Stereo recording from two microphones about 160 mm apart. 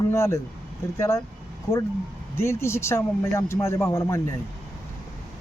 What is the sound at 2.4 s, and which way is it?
Speech, 15° left (ahead or behind).